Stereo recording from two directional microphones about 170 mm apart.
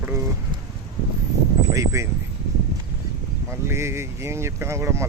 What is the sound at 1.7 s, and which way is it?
Speech, 15° right (ahead or behind).